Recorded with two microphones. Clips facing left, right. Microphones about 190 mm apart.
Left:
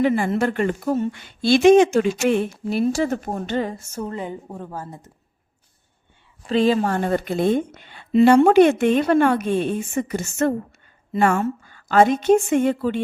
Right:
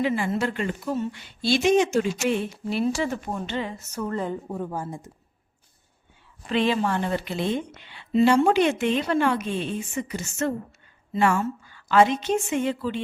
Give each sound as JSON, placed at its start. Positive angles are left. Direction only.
{"t": 0.0, "sound": "speech", "side_deg": 50}
{"t": 3.9, "sound": "a woman's voice", "side_deg": 25}
{"t": 4.2, "sound": "speech", "side_deg": 10}
{"t": 4.6, "sound": "speech", "side_deg": -15}
{"t": 6.5, "sound": "speech", "side_deg": 40}